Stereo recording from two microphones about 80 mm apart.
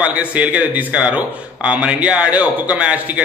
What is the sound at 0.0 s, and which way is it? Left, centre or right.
A man's voice, centre.